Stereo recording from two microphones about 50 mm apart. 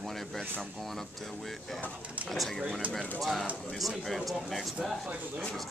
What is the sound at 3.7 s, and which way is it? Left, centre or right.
Speech, centre.